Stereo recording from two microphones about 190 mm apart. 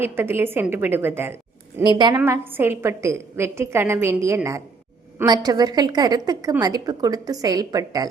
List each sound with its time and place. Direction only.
0.0 s a woman's voice: 10° right (ahead or behind)